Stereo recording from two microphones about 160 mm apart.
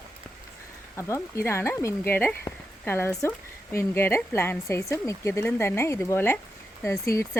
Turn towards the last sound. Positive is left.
turn(degrees=15)  # may be behind; listen again after turning